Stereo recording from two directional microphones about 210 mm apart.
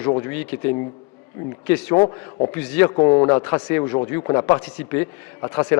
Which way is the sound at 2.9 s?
20° left (ahead or behind).